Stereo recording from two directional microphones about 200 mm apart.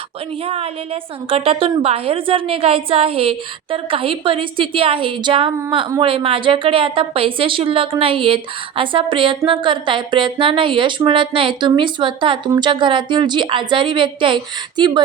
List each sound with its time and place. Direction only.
0.4 s a woman's voice: 30° right (ahead or behind)